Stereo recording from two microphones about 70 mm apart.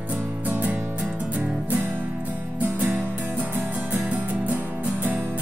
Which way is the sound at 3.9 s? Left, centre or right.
Right.